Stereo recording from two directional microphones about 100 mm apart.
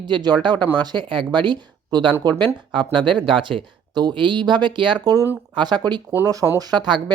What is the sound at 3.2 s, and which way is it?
Speech, 55° right (ahead or behind).